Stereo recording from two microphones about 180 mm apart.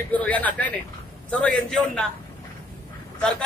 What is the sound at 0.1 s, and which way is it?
A man's voice, 10° left (ahead or behind).